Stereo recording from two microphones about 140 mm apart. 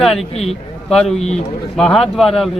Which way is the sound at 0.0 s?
Centre (ahead or behind).